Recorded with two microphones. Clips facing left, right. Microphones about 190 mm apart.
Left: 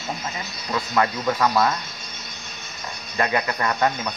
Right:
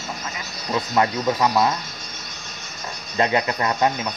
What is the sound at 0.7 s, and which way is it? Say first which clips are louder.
Speech: right 2 dB; 20° right (ahead or behind).